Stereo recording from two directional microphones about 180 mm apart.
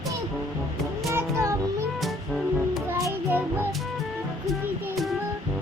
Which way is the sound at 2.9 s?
15° right (ahead or behind).